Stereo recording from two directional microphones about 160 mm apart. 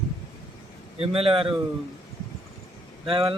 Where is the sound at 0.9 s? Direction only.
35° right (ahead or behind).